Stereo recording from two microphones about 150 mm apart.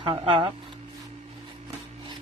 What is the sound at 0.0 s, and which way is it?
Speech, 35° right (ahead or behind).